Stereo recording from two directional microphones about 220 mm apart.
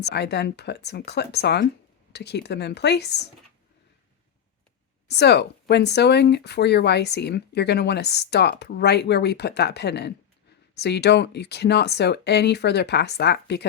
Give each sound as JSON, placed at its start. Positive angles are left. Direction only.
{"t": 0.0, "sound": "speech", "side_deg": 50}
{"t": 5.0, "sound": "speech", "side_deg": 50}